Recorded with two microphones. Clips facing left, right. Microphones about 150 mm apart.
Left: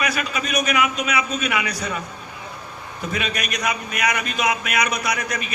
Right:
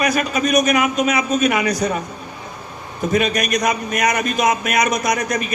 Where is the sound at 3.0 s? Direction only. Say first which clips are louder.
Right 9 dB; 45° right (ahead or behind).